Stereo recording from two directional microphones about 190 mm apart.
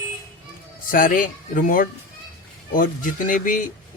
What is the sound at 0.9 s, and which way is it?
Speech, 45° left (ahead or behind).